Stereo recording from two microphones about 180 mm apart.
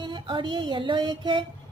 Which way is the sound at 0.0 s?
25° right (ahead or behind).